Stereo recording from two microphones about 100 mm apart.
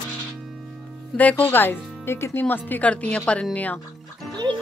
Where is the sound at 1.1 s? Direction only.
15° left (ahead or behind).